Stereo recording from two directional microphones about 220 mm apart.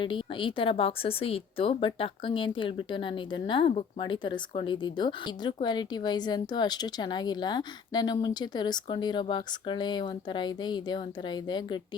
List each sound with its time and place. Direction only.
0.0 s speech: 20° left (ahead or behind)